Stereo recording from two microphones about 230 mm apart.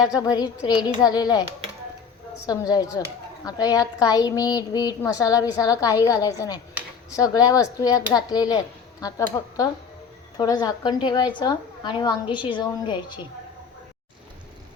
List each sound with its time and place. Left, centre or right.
0.0 s speech: centre
2.5 s a woman's voice: centre